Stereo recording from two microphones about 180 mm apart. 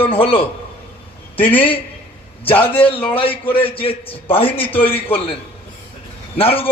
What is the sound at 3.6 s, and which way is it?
Speech, 30° left (ahead or behind).